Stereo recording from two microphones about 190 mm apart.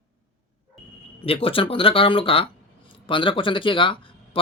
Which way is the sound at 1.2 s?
30° left (ahead or behind).